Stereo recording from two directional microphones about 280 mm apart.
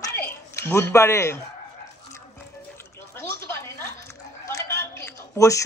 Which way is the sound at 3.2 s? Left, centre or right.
Centre.